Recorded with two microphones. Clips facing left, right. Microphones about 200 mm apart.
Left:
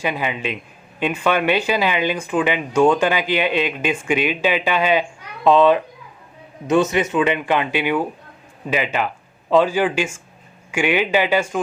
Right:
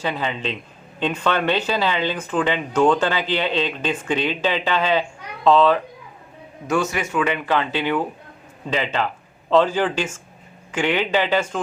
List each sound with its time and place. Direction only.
0.0 s a man's voice: 10° left (ahead or behind)
6.9 s a man's voice: 20° left (ahead or behind)